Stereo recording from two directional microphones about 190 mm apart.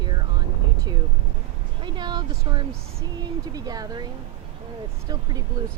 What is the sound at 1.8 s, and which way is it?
Speech, 25° right (ahead or behind).